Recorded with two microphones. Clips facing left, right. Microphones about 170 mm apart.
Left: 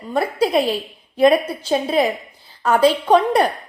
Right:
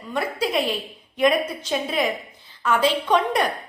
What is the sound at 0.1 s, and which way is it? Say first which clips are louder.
A woman's voice: left 6 dB; 35° left (ahead or behind).